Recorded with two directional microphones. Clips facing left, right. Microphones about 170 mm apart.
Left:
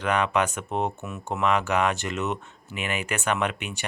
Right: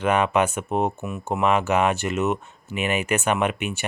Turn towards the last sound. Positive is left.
turn(degrees=-20)  # may be behind; listen again after turning